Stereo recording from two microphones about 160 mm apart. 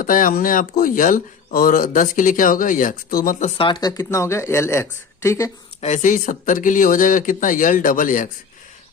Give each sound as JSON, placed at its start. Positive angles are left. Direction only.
{"t": 0.0, "sound": "speech", "side_deg": 60}
{"t": 3.6, "sound": "speech", "side_deg": 25}
{"t": 5.8, "sound": "speech", "side_deg": 50}